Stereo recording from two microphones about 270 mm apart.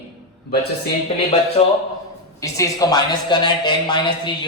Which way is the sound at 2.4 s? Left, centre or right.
Centre.